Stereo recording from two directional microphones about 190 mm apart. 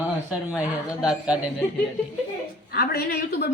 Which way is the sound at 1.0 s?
5° right (ahead or behind).